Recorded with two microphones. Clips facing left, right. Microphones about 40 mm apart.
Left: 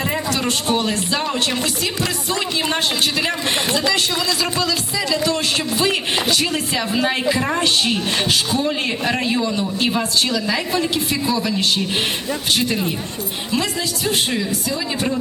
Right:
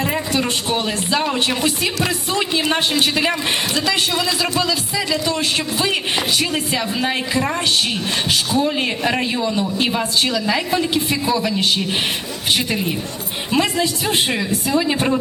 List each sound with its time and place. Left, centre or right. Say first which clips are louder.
0.3 s a woman's voice: even; centre
5.1 s a woman's voice: left 1 dB; centre
12.5 s a woman's voice: left 1 dB; centre
13.5 s speech: right 5 dB; right